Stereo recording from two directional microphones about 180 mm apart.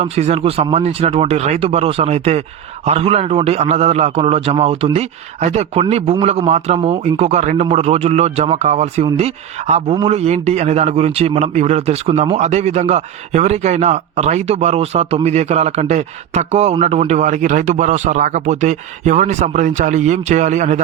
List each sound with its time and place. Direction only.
0.0 s speech: 35° right (ahead or behind)